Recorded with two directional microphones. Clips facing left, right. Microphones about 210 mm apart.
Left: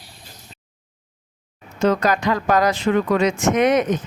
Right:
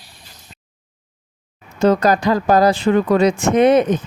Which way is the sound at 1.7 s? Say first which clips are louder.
Right 4 dB; 35° right (ahead or behind).